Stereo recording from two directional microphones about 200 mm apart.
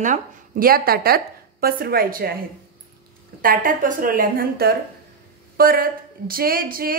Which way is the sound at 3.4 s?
45° right (ahead or behind).